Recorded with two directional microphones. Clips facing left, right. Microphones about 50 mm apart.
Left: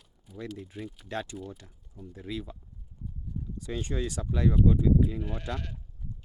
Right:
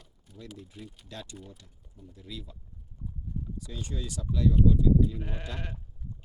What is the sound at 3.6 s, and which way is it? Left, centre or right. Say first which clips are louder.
Speech: left 11 dB; left.